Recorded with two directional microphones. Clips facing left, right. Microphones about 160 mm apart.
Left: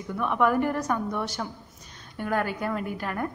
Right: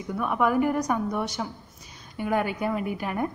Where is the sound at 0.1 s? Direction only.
5° right (ahead or behind).